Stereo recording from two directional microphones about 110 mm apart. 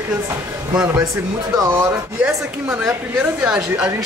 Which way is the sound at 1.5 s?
30° right (ahead or behind).